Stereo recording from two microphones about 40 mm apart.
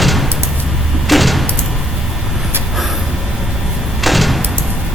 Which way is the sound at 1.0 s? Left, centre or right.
Centre.